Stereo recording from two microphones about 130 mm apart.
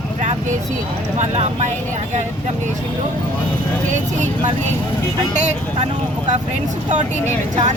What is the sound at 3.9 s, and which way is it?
Speech, 65° right (ahead or behind).